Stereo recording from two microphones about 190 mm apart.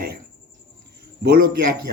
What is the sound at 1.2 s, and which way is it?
Speech, 55° right (ahead or behind).